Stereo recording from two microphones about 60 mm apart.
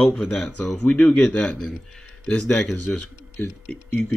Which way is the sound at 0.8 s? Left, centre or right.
Left.